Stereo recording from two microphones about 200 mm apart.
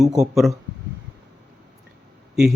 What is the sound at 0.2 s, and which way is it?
Speech, centre (ahead or behind).